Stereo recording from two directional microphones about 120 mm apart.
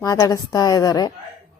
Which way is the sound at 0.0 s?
30° left (ahead or behind).